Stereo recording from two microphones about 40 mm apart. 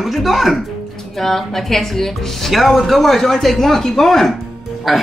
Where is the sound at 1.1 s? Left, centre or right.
Centre.